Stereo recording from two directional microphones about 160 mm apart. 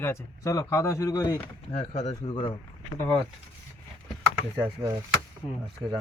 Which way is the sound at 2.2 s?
30° left (ahead or behind).